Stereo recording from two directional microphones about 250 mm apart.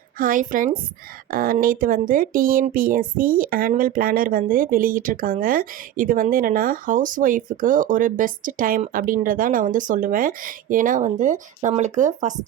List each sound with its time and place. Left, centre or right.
0.2 s speech: right